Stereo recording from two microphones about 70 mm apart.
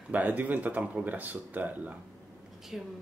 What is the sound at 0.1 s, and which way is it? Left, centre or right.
Speech, right.